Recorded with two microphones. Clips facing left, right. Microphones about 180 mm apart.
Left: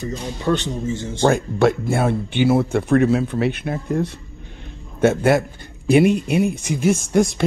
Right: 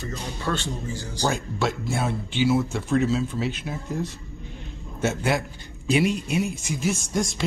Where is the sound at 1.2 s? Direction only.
55° left (ahead or behind).